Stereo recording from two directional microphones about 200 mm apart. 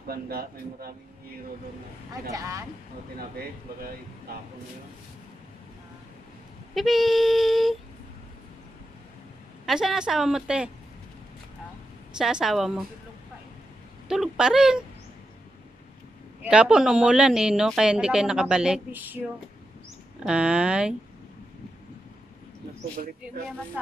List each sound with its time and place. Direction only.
0.1 s speech: 50° right (ahead or behind)
2.3 s speech: 15° right (ahead or behind)
3.2 s speech: 50° right (ahead or behind)
6.7 s speech: centre (ahead or behind)
9.7 s speech: centre (ahead or behind)
12.1 s speech: 5° right (ahead or behind)
14.0 s speech: 5° right (ahead or behind)
16.4 s speech: 5° right (ahead or behind)
20.2 s speech: 5° right (ahead or behind)